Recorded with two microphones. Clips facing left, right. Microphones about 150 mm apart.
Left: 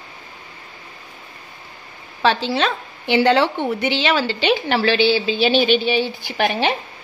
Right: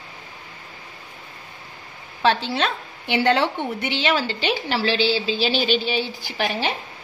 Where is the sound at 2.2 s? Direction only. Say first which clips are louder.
Left 2 dB; 90° left; by 6.8 s 65° left (ahead or behind).